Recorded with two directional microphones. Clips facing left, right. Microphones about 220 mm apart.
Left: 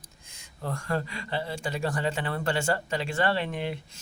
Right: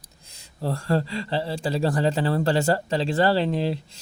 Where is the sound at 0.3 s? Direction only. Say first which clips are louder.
Right 6 dB; 35° right (ahead or behind).